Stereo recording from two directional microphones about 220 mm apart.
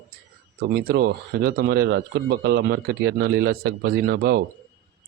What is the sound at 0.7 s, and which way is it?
Speech, 45° right (ahead or behind).